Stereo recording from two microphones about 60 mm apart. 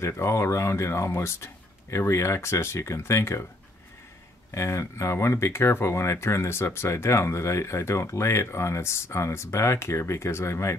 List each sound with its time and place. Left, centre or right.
0.0 s speech: left
4.6 s speech: left